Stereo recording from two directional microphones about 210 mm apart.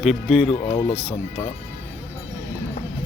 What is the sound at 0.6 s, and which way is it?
Speech, 30° left (ahead or behind).